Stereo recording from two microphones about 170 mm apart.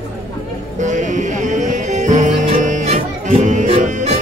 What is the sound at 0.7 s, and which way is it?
Music, 45° right (ahead or behind).